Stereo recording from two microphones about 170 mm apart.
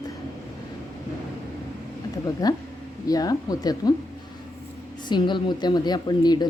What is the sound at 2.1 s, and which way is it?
A woman's voice, 20° left (ahead or behind).